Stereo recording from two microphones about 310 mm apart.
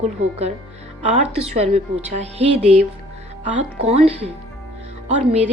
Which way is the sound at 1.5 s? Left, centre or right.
Centre.